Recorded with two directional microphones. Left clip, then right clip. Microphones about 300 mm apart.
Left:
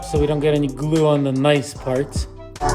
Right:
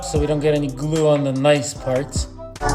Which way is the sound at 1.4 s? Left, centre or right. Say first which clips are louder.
Right 1 dB; left.